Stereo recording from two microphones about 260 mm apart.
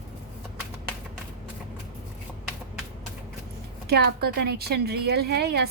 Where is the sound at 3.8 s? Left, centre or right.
Right.